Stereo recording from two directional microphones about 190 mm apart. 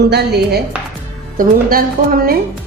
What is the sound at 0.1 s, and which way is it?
Speech, 60° right (ahead or behind).